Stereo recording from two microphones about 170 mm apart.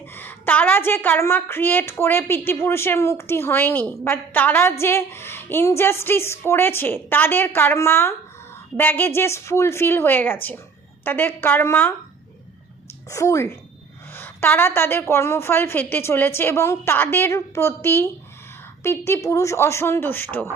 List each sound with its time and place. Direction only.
0.0 s a woman's voice: 10° left (ahead or behind)
13.1 s a woman's voice: 20° left (ahead or behind)